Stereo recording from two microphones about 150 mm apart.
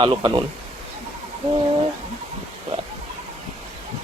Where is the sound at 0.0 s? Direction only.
35° right (ahead or behind).